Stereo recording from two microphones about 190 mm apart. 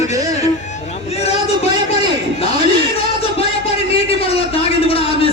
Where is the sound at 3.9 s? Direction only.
30° left (ahead or behind).